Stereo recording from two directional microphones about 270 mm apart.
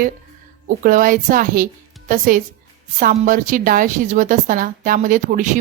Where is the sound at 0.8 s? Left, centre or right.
Right.